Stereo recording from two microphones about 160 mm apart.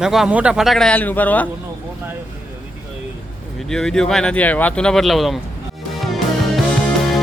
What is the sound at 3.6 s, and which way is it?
Speech, 5° left (ahead or behind).